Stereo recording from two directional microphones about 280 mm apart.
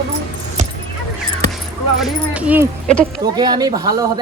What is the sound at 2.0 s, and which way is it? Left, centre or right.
Music, centre.